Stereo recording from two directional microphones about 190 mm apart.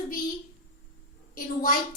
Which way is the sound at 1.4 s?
50° left (ahead or behind).